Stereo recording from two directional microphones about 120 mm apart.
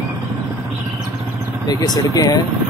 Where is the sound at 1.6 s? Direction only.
35° left (ahead or behind).